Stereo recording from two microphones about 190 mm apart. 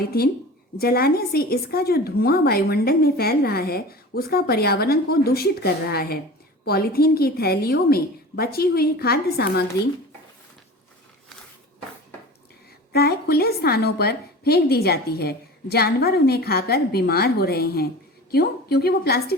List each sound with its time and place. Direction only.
0.0 s a woman's voice: 55° left (ahead or behind)
12.9 s a woman's voice: 55° left (ahead or behind)